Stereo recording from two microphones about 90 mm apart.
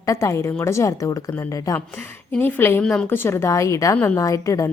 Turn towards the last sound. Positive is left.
turn(degrees=35)  # may be behind; listen again after turning